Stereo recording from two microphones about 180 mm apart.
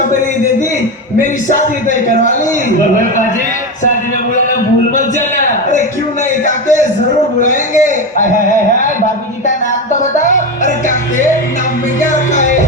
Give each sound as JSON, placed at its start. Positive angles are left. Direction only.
{"t": 1.2, "sound": "speech", "side_deg": 45}
{"t": 4.9, "sound": "a sound", "side_deg": 45}
{"t": 10.0, "sound": "music", "side_deg": 45}
{"t": 12.1, "sound": "music", "side_deg": 45}